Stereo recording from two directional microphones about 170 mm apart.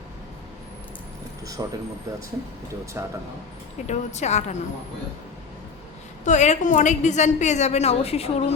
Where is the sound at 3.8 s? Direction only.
40° left (ahead or behind).